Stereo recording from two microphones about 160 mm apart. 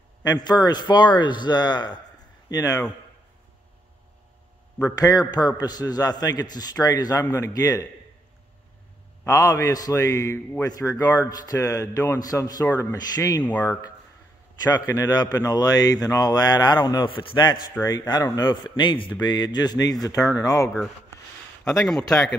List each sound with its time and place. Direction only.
0.2 s a man's voice: 25° left (ahead or behind)
4.8 s a man's voice: 25° left (ahead or behind)
9.2 s a man's voice: 20° left (ahead or behind)
13.4 s speech: 10° left (ahead or behind)
13.7 s a man's voice: 25° left (ahead or behind)
22.0 s a man's voice: 20° left (ahead or behind)